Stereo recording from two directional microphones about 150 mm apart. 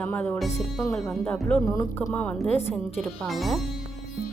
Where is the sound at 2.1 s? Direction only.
10° left (ahead or behind).